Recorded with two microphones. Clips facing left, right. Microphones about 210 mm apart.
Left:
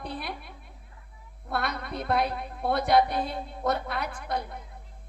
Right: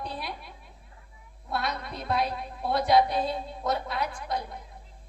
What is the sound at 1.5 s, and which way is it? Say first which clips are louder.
A woman's voice: left 1 dB; 55° left (ahead or behind).